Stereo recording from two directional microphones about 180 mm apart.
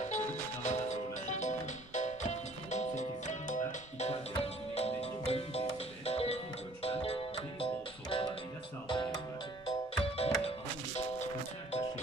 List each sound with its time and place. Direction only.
0.0 s music: 40° left (ahead or behind)